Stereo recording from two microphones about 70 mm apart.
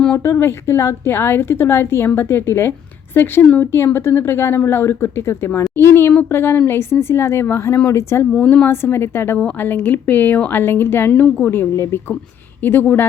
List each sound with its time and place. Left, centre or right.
0.2 s a woman's voice: left
8.4 s speech: centre
8.6 s a woman's voice: left